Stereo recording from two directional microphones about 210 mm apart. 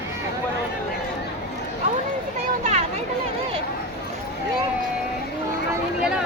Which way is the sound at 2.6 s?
30° right (ahead or behind).